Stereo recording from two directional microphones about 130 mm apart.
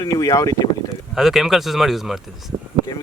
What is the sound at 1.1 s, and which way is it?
Speech, centre (ahead or behind).